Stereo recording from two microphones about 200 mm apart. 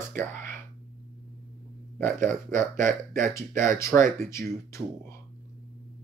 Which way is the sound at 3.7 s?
15° left (ahead or behind).